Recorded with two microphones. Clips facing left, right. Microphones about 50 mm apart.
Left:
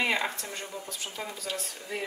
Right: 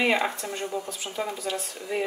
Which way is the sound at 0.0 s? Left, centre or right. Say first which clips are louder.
Right 4 dB; centre.